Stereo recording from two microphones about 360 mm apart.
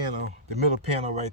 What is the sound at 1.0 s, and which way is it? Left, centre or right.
Speech, centre.